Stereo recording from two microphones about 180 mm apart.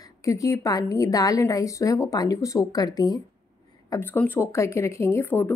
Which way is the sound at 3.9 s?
10° left (ahead or behind).